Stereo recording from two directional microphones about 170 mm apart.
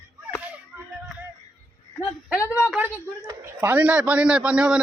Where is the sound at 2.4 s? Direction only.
15° left (ahead or behind).